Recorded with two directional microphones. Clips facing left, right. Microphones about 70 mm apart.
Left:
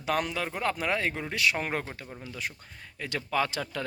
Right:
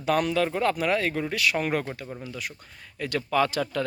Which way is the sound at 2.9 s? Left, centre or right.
Centre.